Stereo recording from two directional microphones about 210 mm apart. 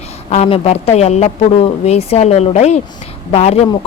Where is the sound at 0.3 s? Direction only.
30° left (ahead or behind).